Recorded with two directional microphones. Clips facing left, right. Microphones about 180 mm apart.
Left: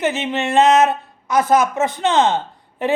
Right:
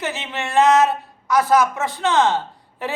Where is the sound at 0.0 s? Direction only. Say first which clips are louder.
Left 7 dB; 20° left (ahead or behind).